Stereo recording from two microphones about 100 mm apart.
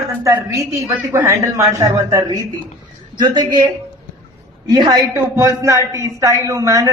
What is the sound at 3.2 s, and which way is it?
A man's voice, 45° right (ahead or behind).